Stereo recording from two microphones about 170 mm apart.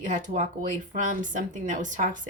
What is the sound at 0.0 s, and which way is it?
Speech, 45° right (ahead or behind).